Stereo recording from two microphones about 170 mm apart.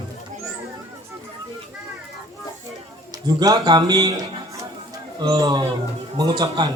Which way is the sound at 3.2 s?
20° right (ahead or behind).